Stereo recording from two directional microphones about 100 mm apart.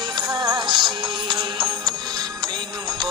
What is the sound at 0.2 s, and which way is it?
Music, 40° right (ahead or behind).